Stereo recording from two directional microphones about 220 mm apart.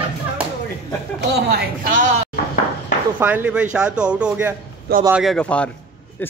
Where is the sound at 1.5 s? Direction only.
40° right (ahead or behind).